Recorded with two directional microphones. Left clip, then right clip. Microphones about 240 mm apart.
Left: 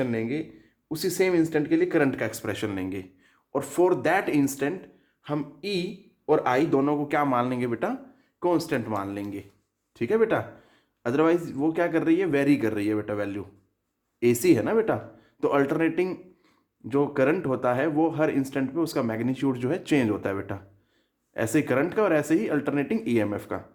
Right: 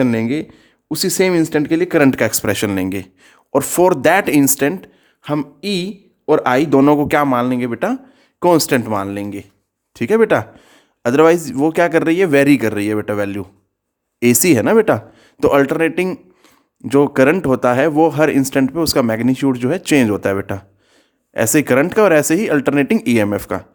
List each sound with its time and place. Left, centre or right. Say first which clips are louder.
0.0 s speech: right 11 dB; right
8.4 s speech: right 12 dB; right